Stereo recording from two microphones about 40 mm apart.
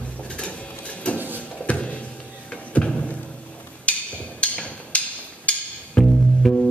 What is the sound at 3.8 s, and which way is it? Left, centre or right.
Wood block, left.